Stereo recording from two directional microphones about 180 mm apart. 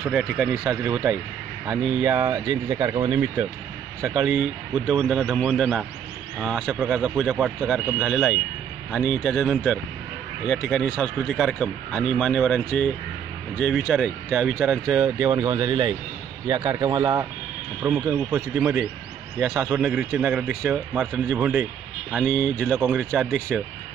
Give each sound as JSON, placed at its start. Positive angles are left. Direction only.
{"t": 0.0, "sound": "speech", "side_deg": -5}
{"t": 4.0, "sound": "speech", "side_deg": -5}
{"t": 15.1, "sound": "speech", "side_deg": -20}
{"t": 19.8, "sound": "speech", "side_deg": -5}